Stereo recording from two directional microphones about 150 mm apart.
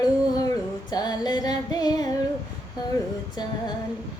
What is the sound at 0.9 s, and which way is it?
Female singing, 25° left (ahead or behind).